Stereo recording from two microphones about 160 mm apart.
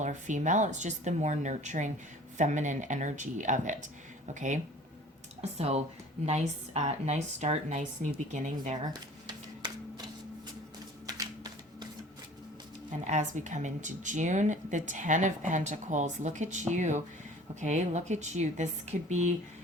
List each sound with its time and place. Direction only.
0.0 s speech: 50° right (ahead or behind)
8.9 s a sound: 25° right (ahead or behind)
11.0 s shuffling cards: 25° right (ahead or behind)
13.1 s speech: 50° right (ahead or behind)